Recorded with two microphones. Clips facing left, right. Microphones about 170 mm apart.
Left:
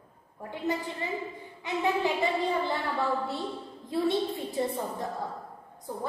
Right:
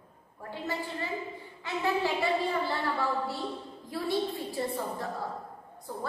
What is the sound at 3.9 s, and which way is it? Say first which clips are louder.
A woman's voice: left 3 dB; 20° left (ahead or behind).